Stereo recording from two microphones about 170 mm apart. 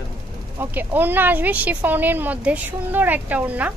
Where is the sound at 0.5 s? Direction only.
10° right (ahead or behind).